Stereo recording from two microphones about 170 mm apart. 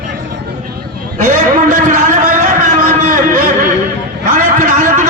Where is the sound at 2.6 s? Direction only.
50° right (ahead or behind).